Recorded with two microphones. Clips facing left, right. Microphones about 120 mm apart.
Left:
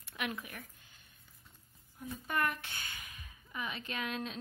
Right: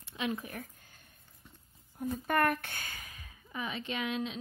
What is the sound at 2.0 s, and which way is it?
A woman's voice, 50° right (ahead or behind).